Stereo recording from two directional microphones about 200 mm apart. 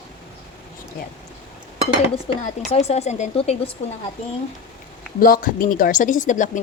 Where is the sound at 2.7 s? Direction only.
30° left (ahead or behind).